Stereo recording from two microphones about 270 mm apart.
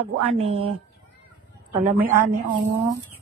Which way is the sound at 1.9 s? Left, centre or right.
Centre.